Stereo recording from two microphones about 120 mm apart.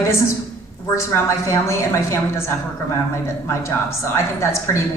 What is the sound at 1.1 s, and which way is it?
A woman's voice, 25° left (ahead or behind).